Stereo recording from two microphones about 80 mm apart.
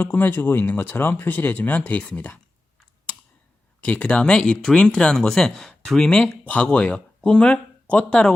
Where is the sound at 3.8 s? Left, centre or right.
Centre.